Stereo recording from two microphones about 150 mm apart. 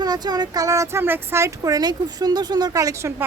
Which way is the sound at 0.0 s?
25° right (ahead or behind).